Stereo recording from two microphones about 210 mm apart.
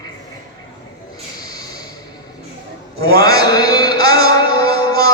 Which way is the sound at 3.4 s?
20° left (ahead or behind).